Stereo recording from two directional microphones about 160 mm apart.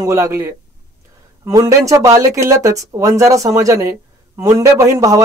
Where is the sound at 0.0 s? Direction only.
20° right (ahead or behind).